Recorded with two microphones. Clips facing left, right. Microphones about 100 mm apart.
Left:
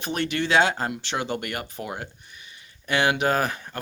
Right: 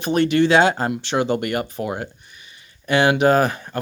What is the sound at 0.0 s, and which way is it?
Speech, 30° right (ahead or behind).